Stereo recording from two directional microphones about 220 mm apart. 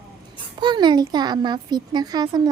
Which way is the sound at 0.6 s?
20° right (ahead or behind).